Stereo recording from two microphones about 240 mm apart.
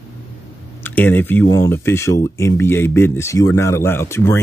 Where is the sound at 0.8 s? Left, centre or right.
Centre.